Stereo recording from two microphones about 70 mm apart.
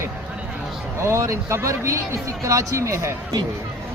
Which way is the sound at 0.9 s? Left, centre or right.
Right.